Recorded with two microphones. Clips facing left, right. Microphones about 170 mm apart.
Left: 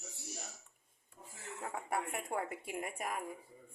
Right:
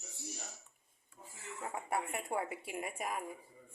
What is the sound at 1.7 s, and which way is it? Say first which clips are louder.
A woman's voice: right 1 dB; centre (ahead or behind).